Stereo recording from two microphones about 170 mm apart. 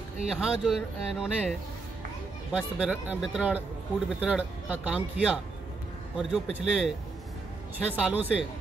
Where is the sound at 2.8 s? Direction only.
5° right (ahead or behind).